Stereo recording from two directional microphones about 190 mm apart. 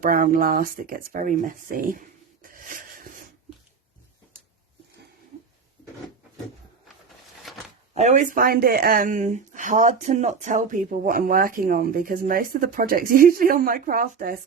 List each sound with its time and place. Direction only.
0.0 s speech: 45° right (ahead or behind)
7.4 s a sound: centre (ahead or behind)
7.9 s speech: 40° right (ahead or behind)